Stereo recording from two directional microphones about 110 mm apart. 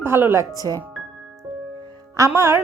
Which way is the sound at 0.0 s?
20° right (ahead or behind).